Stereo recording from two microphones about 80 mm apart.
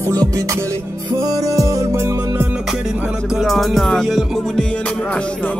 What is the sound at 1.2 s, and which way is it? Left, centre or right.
Music, right.